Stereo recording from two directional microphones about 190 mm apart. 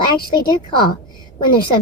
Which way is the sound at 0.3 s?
25° left (ahead or behind).